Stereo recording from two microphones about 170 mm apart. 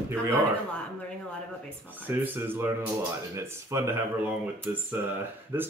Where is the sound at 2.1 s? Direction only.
10° right (ahead or behind).